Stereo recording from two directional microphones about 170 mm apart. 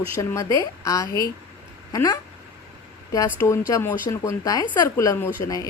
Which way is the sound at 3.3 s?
15° left (ahead or behind).